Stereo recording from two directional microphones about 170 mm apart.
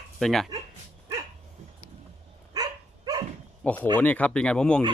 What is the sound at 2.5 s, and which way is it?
Dog, 20° right (ahead or behind).